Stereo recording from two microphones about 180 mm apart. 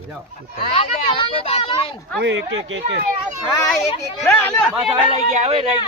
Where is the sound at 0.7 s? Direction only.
30° left (ahead or behind).